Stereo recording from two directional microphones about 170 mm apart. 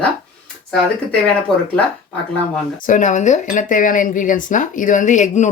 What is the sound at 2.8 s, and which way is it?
Speech, 50° left (ahead or behind).